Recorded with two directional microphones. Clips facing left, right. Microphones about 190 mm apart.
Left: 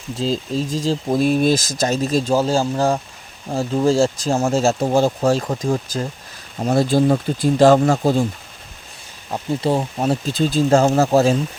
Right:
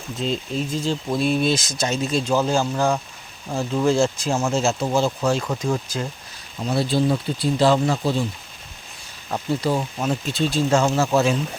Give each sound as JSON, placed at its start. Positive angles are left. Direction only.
{"t": 0.2, "sound": "speech", "side_deg": 35}
{"t": 9.6, "sound": "speech", "side_deg": 25}